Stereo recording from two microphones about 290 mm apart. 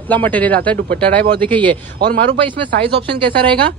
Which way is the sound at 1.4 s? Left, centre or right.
Centre.